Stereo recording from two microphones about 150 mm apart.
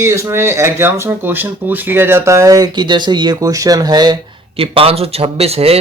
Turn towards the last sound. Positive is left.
turn(degrees=-45)  # may be behind; listen again after turning